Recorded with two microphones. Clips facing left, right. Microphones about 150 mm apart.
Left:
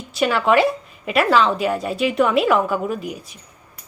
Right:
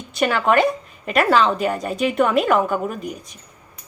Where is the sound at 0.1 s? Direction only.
Centre (ahead or behind).